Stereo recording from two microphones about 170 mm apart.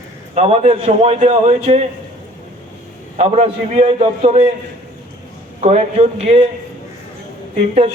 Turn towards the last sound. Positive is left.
turn(degrees=-40)  # may be behind; listen again after turning